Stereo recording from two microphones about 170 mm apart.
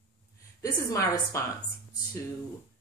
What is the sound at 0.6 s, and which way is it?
Speech, 20° left (ahead or behind).